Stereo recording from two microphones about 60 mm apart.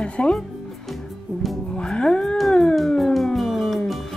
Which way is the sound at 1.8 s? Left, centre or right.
Centre.